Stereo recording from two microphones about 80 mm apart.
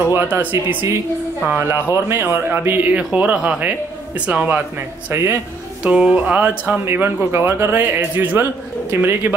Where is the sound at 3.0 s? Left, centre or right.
Centre.